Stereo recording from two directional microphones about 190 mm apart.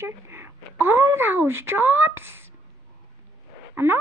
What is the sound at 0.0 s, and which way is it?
Speech, 15° right (ahead or behind).